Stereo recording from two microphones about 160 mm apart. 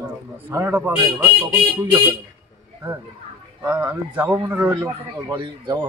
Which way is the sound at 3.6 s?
10° right (ahead or behind).